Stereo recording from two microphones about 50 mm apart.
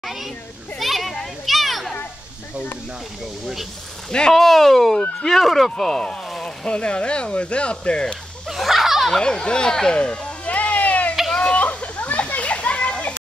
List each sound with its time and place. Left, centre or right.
0.0 s children playing: centre
0.7 s a sound: centre
1.2 s children playing: centre
4.3 s speech: centre; by 8.2 s left
8.5 s snicker: centre
9.1 s speech: centre
10.4 s a sound: left